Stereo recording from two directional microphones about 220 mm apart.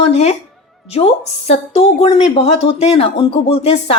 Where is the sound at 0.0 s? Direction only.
30° left (ahead or behind).